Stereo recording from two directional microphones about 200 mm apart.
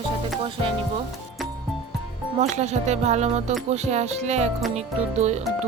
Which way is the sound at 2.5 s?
35° right (ahead or behind).